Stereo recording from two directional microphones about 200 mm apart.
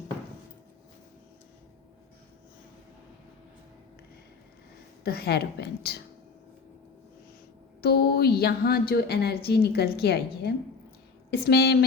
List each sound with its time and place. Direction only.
5.0 s a woman's voice: 50° left (ahead or behind)
7.8 s a woman's voice: 50° left (ahead or behind)